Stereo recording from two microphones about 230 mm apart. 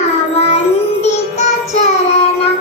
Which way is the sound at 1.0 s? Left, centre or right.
Left.